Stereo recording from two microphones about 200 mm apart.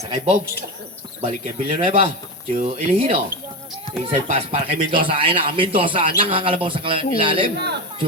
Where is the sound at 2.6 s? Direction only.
40° right (ahead or behind).